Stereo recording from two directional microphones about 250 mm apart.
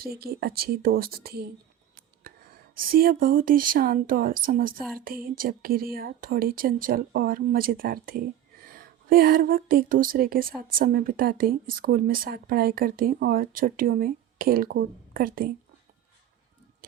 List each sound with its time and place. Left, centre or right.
0.0 s speech: right
2.2 s whispering: right
2.7 s speech: right